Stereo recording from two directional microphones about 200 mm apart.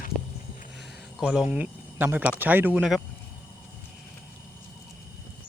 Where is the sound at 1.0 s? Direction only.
Centre (ahead or behind).